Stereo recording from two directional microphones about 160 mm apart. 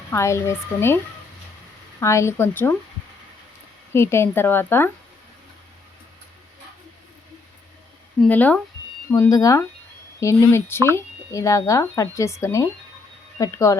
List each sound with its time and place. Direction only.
0.1 s a woman's voice: 15° left (ahead or behind)
2.0 s a woman's voice: 15° left (ahead or behind)
3.9 s a woman's voice: 15° left (ahead or behind)
8.2 s a woman's voice: 10° left (ahead or behind)